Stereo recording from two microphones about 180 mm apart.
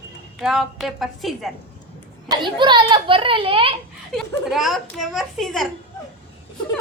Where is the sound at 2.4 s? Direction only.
25° right (ahead or behind).